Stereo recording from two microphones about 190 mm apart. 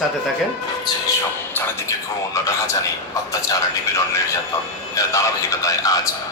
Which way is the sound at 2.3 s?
15° left (ahead or behind).